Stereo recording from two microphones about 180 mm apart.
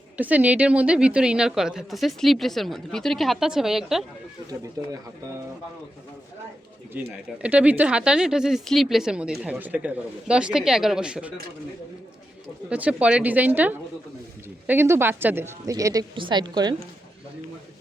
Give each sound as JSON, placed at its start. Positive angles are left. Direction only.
{"t": 0.2, "sound": "a woman's voice", "side_deg": -10}
{"t": 6.9, "sound": "a woman's voice", "side_deg": -10}
{"t": 12.6, "sound": "a woman's voice", "side_deg": -5}